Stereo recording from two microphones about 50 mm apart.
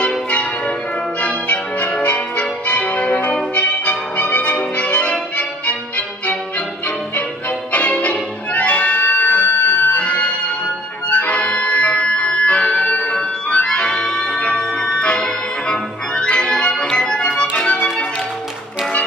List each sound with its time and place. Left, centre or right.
0.0 s change ringing: left
5.7 s music: left
7.7 s music: left
16.9 s organ: centre
17.4 s music: centre